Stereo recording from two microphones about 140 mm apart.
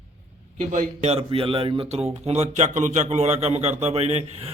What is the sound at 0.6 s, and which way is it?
Speech, 55° right (ahead or behind).